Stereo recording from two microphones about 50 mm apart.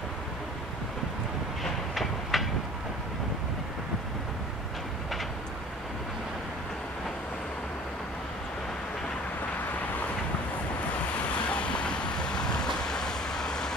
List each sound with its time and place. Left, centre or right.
1.6 s train: centre
11.2 s vehicle: left